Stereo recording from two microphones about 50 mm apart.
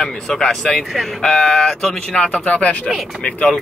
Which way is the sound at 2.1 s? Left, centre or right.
Centre.